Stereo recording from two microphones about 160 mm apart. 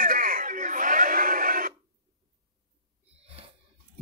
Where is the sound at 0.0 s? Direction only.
60° right (ahead or behind).